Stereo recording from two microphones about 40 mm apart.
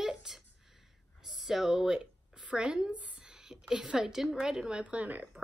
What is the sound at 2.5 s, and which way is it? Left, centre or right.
A woman's voice, right.